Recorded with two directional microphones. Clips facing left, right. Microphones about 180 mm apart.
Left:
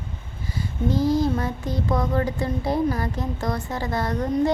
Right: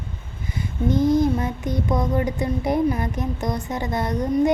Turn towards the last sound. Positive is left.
turn(degrees=-20)  # may be behind; listen again after turning